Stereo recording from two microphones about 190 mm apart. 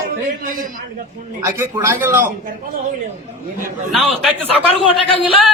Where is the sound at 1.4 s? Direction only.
15° right (ahead or behind).